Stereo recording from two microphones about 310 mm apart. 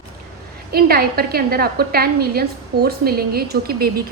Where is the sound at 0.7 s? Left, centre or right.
Right.